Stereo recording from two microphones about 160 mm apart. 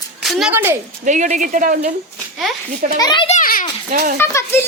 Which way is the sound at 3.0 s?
25° left (ahead or behind).